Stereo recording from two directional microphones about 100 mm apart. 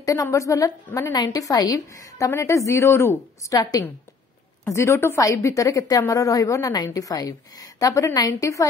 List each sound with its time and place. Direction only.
0.0 s a woman's voice: 35° left (ahead or behind)
4.6 s a woman's voice: 25° left (ahead or behind)